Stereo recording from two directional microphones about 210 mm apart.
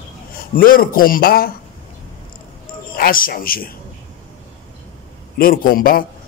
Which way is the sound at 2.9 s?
45° left (ahead or behind).